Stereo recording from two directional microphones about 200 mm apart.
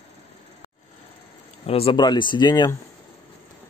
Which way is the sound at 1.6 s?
30° left (ahead or behind).